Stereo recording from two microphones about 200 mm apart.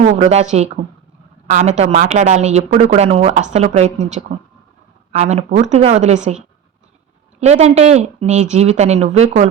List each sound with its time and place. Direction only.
0.2 s speech: 35° right (ahead or behind)